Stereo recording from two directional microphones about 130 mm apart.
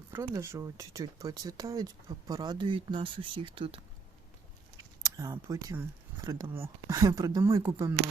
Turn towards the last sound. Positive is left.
turn(degrees=-25)  # may be behind; listen again after turning